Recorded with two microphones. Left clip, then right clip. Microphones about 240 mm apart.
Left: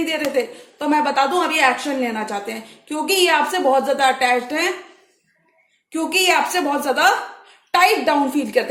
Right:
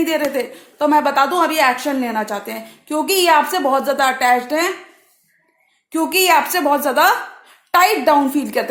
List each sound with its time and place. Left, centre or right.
0.3 s a woman's voice: right
5.9 s a woman's voice: right